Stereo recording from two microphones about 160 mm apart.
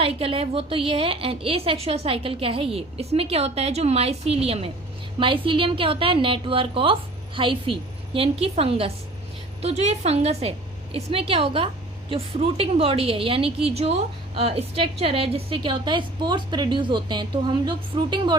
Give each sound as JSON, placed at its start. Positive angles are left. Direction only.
{"t": 0.0, "sound": "a woman's voice", "side_deg": -35}